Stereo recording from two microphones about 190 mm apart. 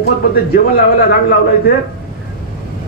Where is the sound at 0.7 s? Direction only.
55° left (ahead or behind).